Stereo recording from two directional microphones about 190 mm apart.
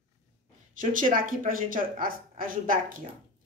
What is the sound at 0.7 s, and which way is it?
A woman's voice, 45° right (ahead or behind).